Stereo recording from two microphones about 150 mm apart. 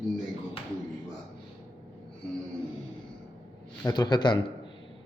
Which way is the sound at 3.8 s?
30° left (ahead or behind).